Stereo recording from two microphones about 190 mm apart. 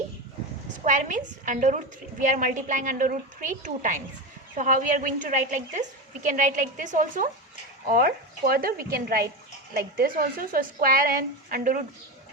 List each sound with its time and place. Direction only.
0.9 s a woman's voice: 40° right (ahead or behind)